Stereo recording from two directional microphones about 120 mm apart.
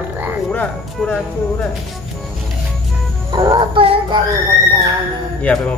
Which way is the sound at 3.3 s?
40° right (ahead or behind).